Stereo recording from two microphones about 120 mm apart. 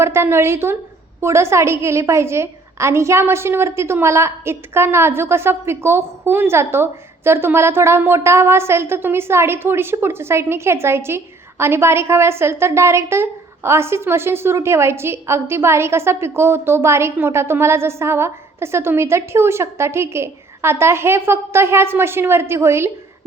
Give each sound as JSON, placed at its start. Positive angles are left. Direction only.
{"t": 0.0, "sound": "a woman's voice", "side_deg": -20}